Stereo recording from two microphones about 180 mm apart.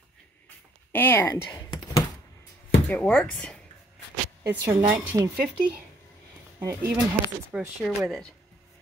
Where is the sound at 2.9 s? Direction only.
10° left (ahead or behind).